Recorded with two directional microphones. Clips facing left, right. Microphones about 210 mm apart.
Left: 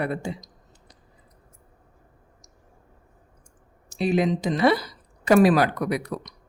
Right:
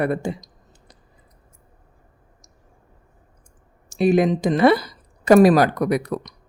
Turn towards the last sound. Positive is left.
turn(degrees=-45)  # may be behind; listen again after turning